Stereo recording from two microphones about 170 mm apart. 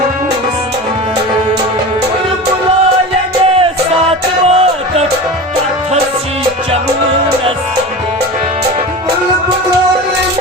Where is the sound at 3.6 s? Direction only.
35° right (ahead or behind).